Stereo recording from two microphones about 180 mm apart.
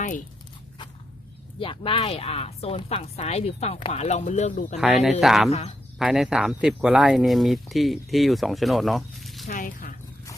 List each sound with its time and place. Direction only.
1.5 s a woman's voice: 30° left (ahead or behind)
4.8 s speech: centre (ahead or behind)
5.5 s a woman's voice: 35° left (ahead or behind)
6.0 s speech: 5° right (ahead or behind)
9.5 s speech: 50° left (ahead or behind)